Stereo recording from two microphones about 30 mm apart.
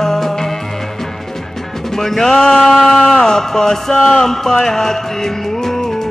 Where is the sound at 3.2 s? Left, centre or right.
Centre.